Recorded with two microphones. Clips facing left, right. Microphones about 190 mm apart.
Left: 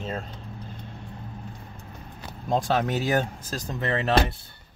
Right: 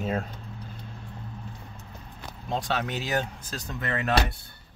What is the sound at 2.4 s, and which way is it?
Speech, 45° left (ahead or behind).